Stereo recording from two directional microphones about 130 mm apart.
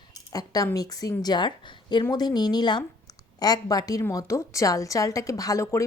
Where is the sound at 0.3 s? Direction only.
30° left (ahead or behind).